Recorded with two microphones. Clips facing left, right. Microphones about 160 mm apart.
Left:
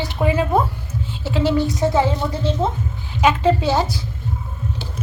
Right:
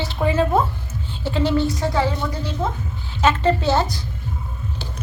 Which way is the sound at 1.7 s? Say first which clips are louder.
Left 3 dB; 20° left (ahead or behind).